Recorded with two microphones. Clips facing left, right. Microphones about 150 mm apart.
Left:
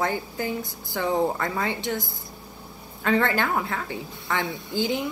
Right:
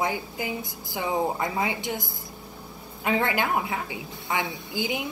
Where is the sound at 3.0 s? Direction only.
15° right (ahead or behind).